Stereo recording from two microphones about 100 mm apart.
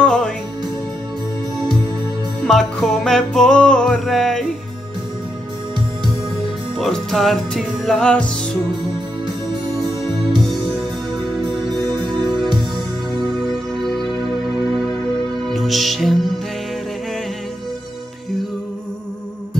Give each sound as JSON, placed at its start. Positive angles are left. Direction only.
{"t": 0.0, "sound": "music", "side_deg": 10}
{"t": 2.4, "sound": "music", "side_deg": 5}
{"t": 6.8, "sound": "music", "side_deg": 5}
{"t": 11.4, "sound": "music", "side_deg": -45}
{"t": 15.5, "sound": "music", "side_deg": 0}